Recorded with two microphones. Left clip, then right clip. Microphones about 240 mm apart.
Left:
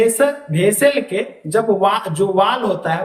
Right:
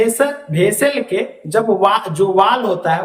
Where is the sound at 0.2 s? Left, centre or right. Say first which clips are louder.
Right 1 dB; centre.